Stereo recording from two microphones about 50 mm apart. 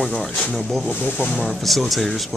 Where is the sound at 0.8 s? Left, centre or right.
Left.